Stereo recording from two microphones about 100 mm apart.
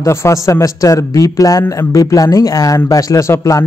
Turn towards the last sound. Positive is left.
turn(degrees=30)  # may be behind; listen again after turning